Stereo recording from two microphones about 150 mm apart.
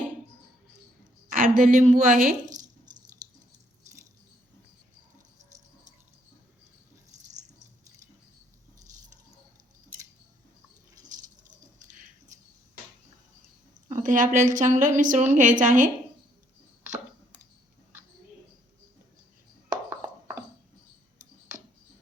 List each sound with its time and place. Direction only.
1.3 s a woman's voice: 65° right (ahead or behind)
13.9 s a woman's voice: 60° right (ahead or behind)
20.0 s a sound: 15° right (ahead or behind)